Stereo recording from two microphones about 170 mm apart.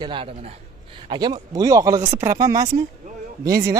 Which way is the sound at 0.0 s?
30° right (ahead or behind).